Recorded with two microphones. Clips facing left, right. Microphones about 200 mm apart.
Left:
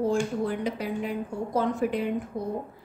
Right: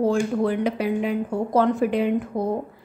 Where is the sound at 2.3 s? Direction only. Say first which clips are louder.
Right 7 dB; 90° right.